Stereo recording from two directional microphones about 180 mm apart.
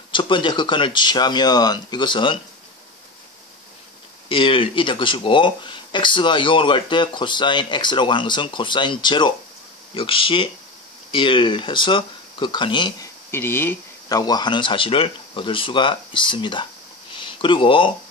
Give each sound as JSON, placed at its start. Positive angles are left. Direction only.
{"t": 0.1, "sound": "speech", "side_deg": 25}
{"t": 4.3, "sound": "speech", "side_deg": 30}
{"t": 13.3, "sound": "speech", "side_deg": 10}